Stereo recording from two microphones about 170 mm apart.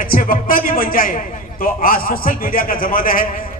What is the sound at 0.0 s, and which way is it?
A man's voice, 55° left (ahead or behind).